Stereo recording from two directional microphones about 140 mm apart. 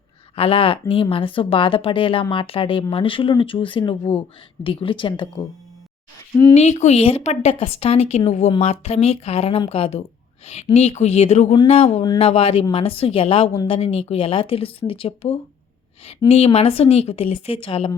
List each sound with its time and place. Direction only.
0.3 s speech: 40° left (ahead or behind)
6.5 s a woman's voice: 50° left (ahead or behind)